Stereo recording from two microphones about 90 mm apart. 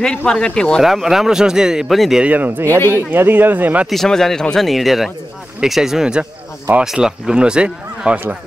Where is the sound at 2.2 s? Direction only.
15° right (ahead or behind).